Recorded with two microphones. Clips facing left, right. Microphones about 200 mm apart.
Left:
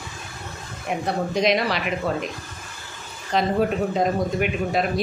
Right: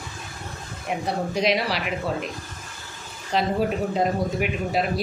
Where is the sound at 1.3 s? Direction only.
5° right (ahead or behind).